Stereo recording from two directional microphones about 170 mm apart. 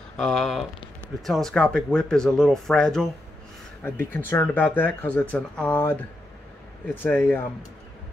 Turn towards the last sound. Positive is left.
turn(degrees=10)  # may be behind; listen again after turning